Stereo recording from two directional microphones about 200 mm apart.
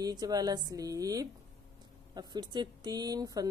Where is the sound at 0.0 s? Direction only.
20° right (ahead or behind).